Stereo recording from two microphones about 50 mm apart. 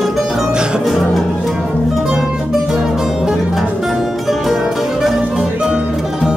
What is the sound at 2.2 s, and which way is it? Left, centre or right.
Music, centre.